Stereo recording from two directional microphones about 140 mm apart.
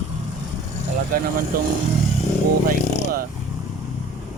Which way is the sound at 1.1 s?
90° right.